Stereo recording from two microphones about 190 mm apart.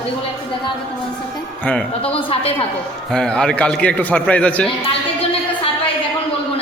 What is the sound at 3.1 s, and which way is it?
A man's voice, centre (ahead or behind).